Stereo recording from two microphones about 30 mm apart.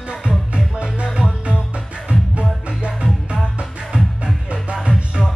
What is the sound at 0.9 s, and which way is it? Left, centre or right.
Music, right.